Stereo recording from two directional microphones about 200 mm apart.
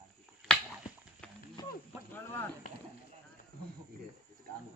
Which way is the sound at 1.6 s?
20° left (ahead or behind).